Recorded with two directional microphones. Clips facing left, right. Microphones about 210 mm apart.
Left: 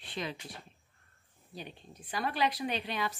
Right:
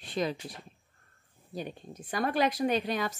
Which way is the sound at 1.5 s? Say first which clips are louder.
Right 7 dB; 45° right (ahead or behind).